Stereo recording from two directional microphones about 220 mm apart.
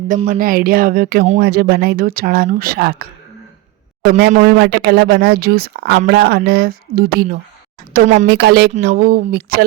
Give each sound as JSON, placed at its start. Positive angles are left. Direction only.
{"t": 0.1, "sound": "speech", "side_deg": -40}
{"t": 4.2, "sound": "speech", "side_deg": -45}
{"t": 8.3, "sound": "speech", "side_deg": -45}